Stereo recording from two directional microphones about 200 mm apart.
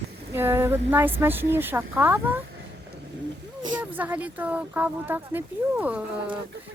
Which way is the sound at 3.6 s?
20° right (ahead or behind).